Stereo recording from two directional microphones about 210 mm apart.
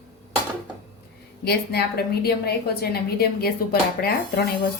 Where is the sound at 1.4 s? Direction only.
50° left (ahead or behind).